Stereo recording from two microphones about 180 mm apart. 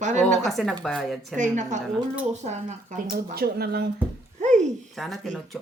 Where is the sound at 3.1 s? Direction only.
60° right (ahead or behind).